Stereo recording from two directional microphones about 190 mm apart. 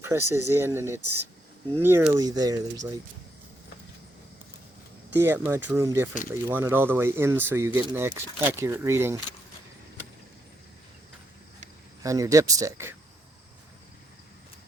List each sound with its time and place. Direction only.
0.0 s speech: 15° right (ahead or behind)
5.1 s speech: 15° right (ahead or behind)
12.0 s speech: 15° right (ahead or behind)